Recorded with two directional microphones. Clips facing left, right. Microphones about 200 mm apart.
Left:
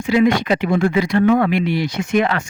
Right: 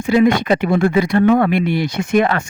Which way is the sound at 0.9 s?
55° right (ahead or behind).